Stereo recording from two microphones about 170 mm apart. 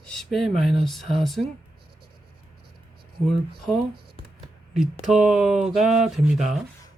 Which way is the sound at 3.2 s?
Centre (ahead or behind).